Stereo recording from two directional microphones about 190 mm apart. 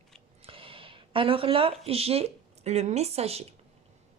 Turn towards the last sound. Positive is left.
turn(degrees=-30)  # may be behind; listen again after turning